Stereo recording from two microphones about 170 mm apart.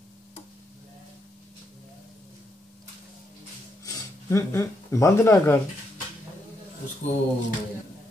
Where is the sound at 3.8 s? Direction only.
20° left (ahead or behind).